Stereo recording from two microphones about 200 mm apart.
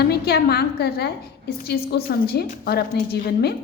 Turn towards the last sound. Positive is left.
turn(degrees=50)  # may be behind; listen again after turning